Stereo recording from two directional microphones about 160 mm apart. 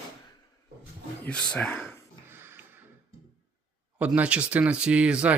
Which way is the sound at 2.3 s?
15° right (ahead or behind).